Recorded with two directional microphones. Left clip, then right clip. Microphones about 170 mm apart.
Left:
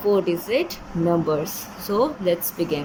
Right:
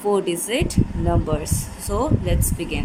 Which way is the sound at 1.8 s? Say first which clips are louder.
Left 3 dB; 15° right (ahead or behind).